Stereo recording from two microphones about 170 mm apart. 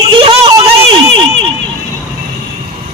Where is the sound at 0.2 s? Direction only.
30° right (ahead or behind).